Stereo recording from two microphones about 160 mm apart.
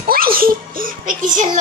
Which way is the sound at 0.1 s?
65° right (ahead or behind).